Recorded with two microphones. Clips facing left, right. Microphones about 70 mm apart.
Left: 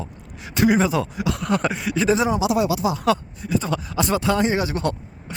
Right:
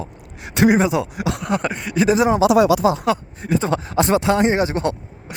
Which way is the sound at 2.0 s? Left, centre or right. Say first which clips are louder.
Right 3 dB; centre.